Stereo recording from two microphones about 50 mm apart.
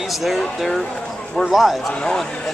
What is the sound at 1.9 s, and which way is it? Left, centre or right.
Speech, centre.